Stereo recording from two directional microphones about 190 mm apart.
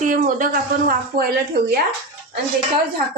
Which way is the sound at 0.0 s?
45° right (ahead or behind).